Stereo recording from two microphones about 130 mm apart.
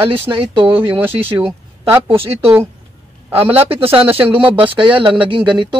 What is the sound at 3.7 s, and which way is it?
Speech, 45° right (ahead or behind).